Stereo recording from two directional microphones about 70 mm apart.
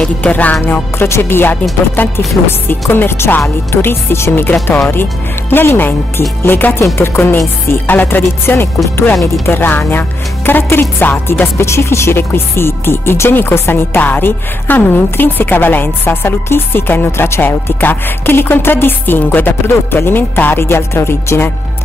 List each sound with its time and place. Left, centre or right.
0.2 s speech: left
0.6 s speech: left